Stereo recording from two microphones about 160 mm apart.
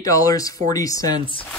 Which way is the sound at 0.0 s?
20° left (ahead or behind).